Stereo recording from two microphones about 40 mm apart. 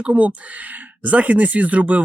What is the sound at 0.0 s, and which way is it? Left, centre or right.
Speech, right.